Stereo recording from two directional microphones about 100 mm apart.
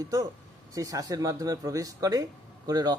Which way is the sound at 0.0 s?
35° right (ahead or behind).